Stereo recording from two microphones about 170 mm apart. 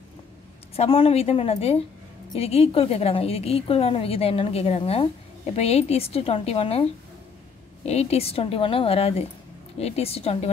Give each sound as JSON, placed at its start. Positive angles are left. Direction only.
{"t": 0.7, "sound": "a woman's voice", "side_deg": 35}